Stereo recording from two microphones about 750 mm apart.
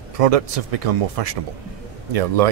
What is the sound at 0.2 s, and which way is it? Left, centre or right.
Speech, right.